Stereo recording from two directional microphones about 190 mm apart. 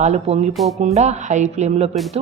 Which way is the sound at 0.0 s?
35° right (ahead or behind).